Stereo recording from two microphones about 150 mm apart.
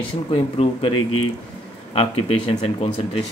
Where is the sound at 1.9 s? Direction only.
40° left (ahead or behind).